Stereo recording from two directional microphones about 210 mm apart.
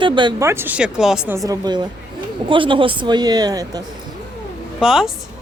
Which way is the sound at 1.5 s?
20° right (ahead or behind).